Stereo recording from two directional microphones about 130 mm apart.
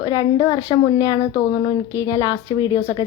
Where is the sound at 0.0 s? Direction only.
35° left (ahead or behind).